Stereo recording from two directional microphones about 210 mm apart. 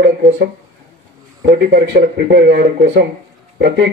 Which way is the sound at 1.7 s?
45° right (ahead or behind).